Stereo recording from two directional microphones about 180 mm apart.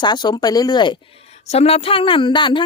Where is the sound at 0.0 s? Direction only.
25° left (ahead or behind).